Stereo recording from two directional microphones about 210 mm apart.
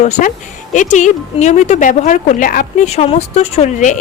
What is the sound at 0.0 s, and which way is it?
A woman's voice, 35° left (ahead or behind).